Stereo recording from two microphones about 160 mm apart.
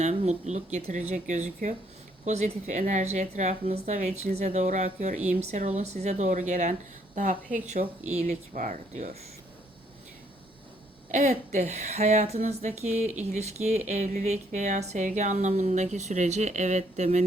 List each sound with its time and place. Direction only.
0.0 s speech: 45° right (ahead or behind)
11.1 s speech: 50° right (ahead or behind)